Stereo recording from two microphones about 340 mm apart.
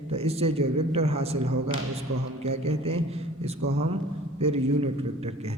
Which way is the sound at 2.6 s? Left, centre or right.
Centre.